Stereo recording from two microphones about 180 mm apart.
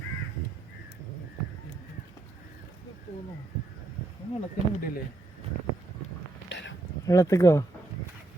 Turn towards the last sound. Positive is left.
turn(degrees=15)  # may be behind; listen again after turning